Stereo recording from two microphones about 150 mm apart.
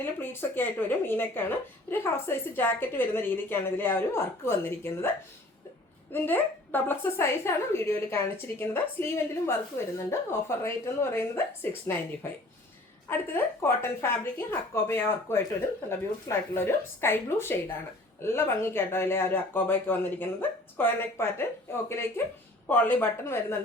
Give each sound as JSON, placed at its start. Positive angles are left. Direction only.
{"t": 0.0, "sound": "speech", "side_deg": 15}
{"t": 6.1, "sound": "speech", "side_deg": 15}